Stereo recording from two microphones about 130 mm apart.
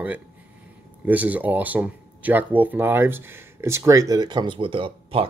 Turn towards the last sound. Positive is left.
turn(degrees=-40)  # may be behind; listen again after turning